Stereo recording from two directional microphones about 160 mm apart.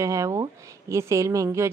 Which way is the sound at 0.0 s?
20° right (ahead or behind).